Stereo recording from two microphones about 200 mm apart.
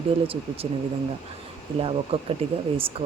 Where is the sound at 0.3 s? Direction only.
30° right (ahead or behind).